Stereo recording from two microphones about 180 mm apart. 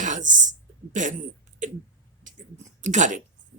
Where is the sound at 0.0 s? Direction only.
45° right (ahead or behind).